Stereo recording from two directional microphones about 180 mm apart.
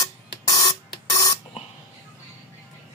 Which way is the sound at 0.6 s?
20° left (ahead or behind).